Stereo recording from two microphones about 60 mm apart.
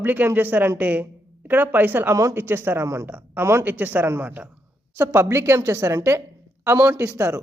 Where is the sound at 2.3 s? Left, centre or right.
Right.